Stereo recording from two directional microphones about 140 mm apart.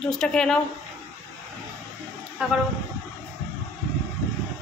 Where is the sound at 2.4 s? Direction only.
5° right (ahead or behind).